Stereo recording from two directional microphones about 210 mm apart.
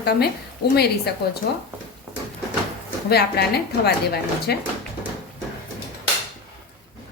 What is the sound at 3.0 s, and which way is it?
A woman's voice, 50° left (ahead or behind).